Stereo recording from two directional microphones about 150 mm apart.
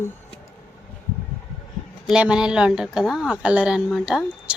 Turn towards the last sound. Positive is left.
turn(degrees=-5)  # may be behind; listen again after turning